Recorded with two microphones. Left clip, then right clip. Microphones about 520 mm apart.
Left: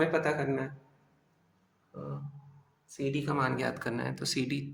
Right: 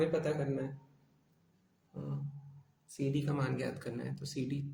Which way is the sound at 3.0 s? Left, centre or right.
Right.